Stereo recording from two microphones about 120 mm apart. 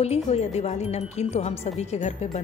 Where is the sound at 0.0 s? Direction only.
60° left (ahead or behind).